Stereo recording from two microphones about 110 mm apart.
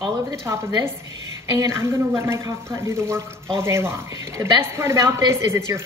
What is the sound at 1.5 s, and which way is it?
Speech, 25° right (ahead or behind).